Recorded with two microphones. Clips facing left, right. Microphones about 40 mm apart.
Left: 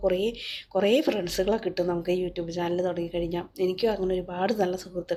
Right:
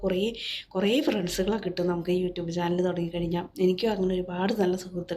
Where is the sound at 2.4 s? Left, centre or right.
Right.